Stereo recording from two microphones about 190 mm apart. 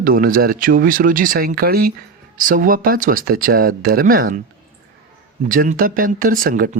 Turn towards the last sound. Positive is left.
turn(degrees=-45)  # may be behind; listen again after turning